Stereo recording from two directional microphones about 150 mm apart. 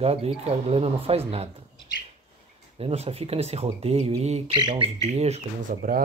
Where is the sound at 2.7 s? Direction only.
40° right (ahead or behind).